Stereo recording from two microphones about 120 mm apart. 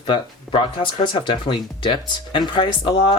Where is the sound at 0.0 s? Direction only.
40° left (ahead or behind).